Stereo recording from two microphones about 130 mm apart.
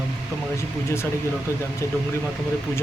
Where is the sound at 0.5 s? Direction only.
20° left (ahead or behind).